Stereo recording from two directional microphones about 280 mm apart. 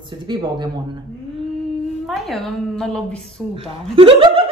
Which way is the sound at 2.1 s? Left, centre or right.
Centre.